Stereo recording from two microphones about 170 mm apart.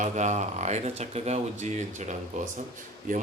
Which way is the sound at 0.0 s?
45° right (ahead or behind).